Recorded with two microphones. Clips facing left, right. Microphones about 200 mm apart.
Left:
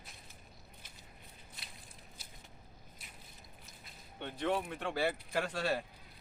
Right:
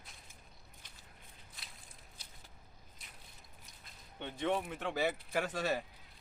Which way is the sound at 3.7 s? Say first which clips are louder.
Left 3 dB; 5° left (ahead or behind).